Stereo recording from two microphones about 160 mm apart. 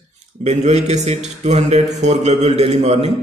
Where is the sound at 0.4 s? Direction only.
45° right (ahead or behind).